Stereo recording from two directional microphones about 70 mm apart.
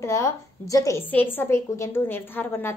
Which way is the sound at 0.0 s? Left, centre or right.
Left.